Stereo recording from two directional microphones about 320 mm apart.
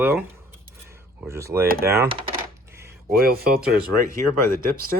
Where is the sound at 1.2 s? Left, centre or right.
Centre.